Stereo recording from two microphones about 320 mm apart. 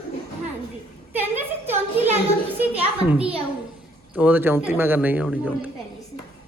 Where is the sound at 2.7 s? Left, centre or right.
Centre.